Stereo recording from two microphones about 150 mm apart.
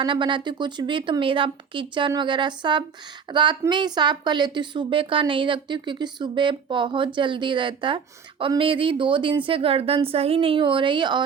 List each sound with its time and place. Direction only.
0.0 s a woman's voice: 30° right (ahead or behind)